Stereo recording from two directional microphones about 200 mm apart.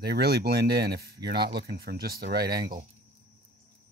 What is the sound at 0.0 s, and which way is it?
Speech, 50° right (ahead or behind).